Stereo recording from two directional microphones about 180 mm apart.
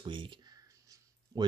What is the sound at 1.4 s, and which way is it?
Speech, 20° right (ahead or behind).